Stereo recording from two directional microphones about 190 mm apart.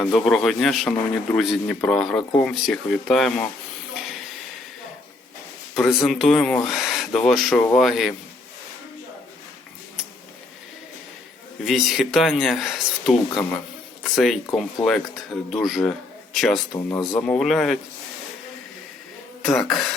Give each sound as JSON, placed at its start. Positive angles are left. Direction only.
{"t": 0.0, "sound": "speech", "side_deg": 0}
{"t": 5.7, "sound": "speech", "side_deg": 0}
{"t": 11.6, "sound": "speech", "side_deg": 0}
{"t": 16.7, "sound": "speech", "side_deg": 20}
{"t": 17.2, "sound": "speech", "side_deg": 5}
{"t": 19.5, "sound": "speech", "side_deg": 0}